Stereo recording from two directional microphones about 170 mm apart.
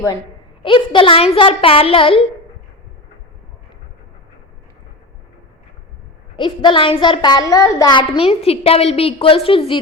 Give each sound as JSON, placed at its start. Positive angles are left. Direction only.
{"t": 0.6, "sound": "a woman's voice", "side_deg": 30}
{"t": 6.3, "sound": "a woman's voice", "side_deg": 30}